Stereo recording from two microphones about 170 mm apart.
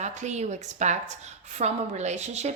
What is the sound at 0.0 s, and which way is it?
A woman's voice, 45° right (ahead or behind).